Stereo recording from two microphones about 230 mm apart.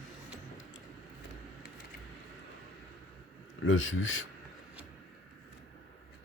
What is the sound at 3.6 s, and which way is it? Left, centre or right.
Speech, left.